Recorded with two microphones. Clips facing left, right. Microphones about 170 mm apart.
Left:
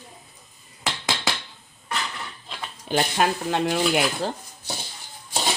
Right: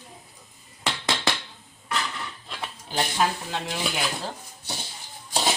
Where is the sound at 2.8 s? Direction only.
70° left (ahead or behind).